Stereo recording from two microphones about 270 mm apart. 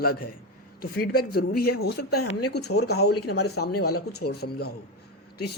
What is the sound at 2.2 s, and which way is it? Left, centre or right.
Speech, left.